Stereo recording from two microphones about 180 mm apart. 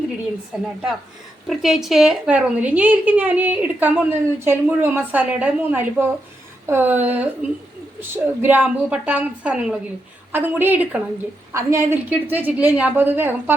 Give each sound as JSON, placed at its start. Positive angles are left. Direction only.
{"t": 1.5, "sound": "a woman's voice", "side_deg": 0}